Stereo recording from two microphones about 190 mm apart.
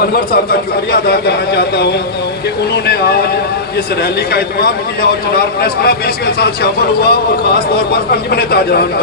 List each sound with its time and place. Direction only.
1.0 s speech: 55° left (ahead or behind)
4.3 s speech: 55° left (ahead or behind)
8.3 s speech: 55° left (ahead or behind)